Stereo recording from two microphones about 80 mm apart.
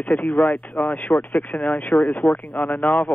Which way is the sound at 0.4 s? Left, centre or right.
Left.